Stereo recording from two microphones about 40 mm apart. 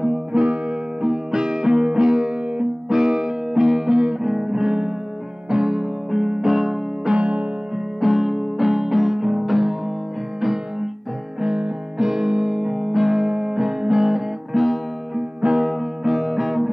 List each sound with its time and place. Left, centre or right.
0.3 s music: right
2.2 s music: right
2.9 s music: centre
4.2 s guitar: centre
5.5 s music: centre
7.2 s music: right
7.7 s music: centre
12.0 s music: centre
15.1 s music: centre